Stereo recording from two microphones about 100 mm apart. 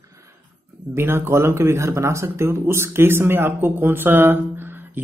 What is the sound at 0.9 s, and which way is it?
Speech, 25° right (ahead or behind).